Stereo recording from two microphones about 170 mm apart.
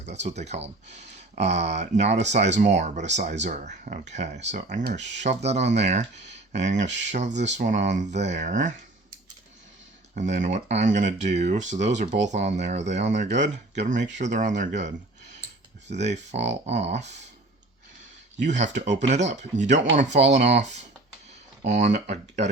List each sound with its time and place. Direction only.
0.0 s speech: 40° right (ahead or behind)
10.2 s speech: 45° right (ahead or behind)
18.4 s speech: 45° right (ahead or behind)